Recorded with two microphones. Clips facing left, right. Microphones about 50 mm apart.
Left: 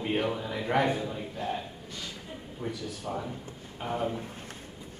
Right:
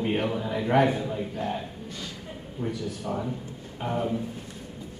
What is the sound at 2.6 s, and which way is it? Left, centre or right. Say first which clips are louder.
A man's voice: right 5 dB; centre.